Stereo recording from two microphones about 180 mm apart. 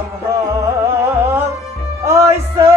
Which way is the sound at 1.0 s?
15° right (ahead or behind).